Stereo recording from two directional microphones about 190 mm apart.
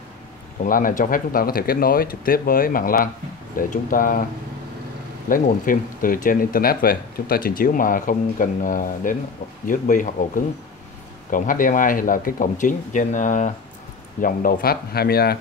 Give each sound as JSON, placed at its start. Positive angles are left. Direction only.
{"t": 0.6, "sound": "speech", "side_deg": 45}
{"t": 5.3, "sound": "speech", "side_deg": 45}